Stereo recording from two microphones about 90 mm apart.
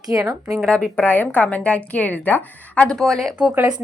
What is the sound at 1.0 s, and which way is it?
A woman's voice, 20° left (ahead or behind).